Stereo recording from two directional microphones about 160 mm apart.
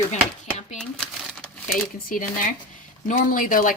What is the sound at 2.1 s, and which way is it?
Speech, 55° left (ahead or behind).